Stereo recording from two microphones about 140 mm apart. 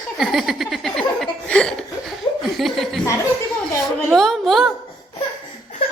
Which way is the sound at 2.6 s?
Centre (ahead or behind).